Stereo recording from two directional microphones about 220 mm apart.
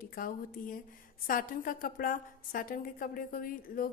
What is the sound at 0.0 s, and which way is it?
A woman's voice, 40° left (ahead or behind).